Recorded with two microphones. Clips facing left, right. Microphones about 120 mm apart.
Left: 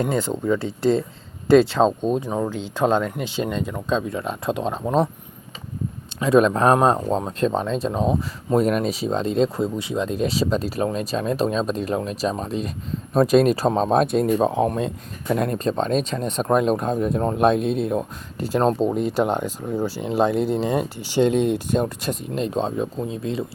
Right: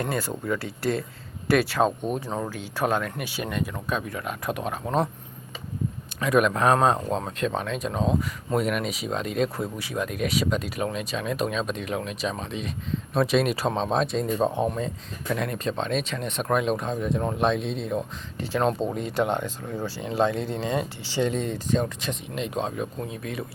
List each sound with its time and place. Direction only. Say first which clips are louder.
0.0 s speech: left 6 dB; 20° left (ahead or behind)
2.6 s speech: left 5 dB; 25° left (ahead or behind)
6.1 s speech: left 5 dB; 30° left (ahead or behind)
13.9 s speech: left 6 dB; 55° left (ahead or behind)
15.4 s speech: left 7 dB; 40° left (ahead or behind)
18.9 s speech: left 4 dB; 5° left (ahead or behind)
20.7 s speech: left 6 dB; 60° left (ahead or behind)
21.7 s speech: left 3 dB; 45° left (ahead or behind); by 23.5 s 25° left (ahead or behind)